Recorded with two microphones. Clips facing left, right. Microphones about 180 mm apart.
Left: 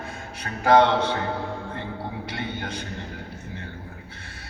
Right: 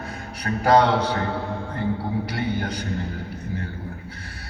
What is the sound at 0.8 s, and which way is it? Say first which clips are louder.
Speech: even; 25° left (ahead or behind).